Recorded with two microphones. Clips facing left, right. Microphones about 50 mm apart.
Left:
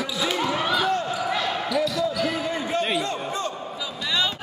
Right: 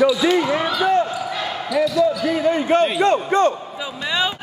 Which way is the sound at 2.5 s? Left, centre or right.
Right.